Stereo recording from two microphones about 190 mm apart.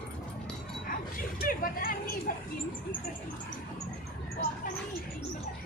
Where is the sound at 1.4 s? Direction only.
50° left (ahead or behind).